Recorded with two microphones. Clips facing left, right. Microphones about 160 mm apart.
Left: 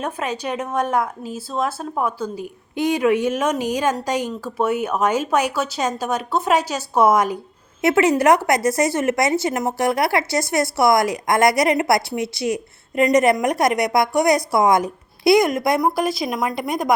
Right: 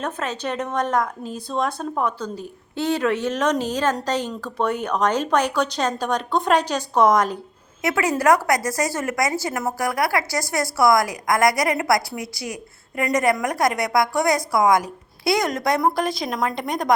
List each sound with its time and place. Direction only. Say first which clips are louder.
0.0 s speech: left 1 dB; 10° left (ahead or behind)
7.8 s speech: left 6 dB; 25° left (ahead or behind); by 16.9 s 5° left (ahead or behind)